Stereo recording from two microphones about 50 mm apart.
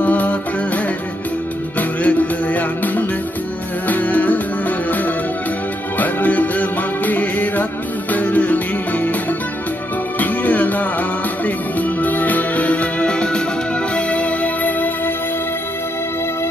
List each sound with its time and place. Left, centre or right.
0.0 s music: left
1.8 s music: left
10.1 s music: left